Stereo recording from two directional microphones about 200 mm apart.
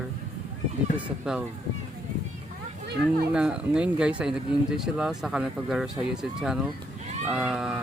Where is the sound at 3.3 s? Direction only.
5° right (ahead or behind).